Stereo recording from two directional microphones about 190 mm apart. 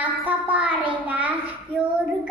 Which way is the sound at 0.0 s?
10° right (ahead or behind).